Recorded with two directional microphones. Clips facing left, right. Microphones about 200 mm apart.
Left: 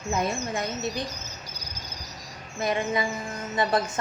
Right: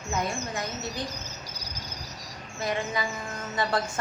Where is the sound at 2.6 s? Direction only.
20° left (ahead or behind).